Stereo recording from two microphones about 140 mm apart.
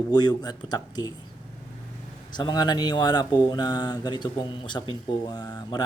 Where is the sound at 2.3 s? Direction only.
30° left (ahead or behind).